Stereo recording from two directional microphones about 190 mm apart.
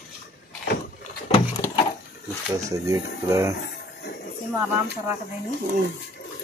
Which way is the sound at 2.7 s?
15° right (ahead or behind).